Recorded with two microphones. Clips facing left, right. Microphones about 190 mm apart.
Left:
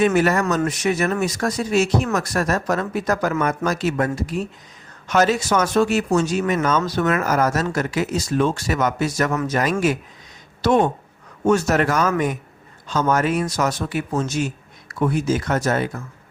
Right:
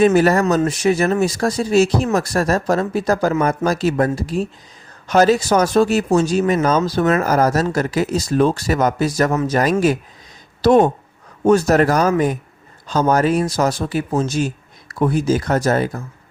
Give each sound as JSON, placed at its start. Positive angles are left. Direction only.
{"t": 0.0, "sound": "speech", "side_deg": -35}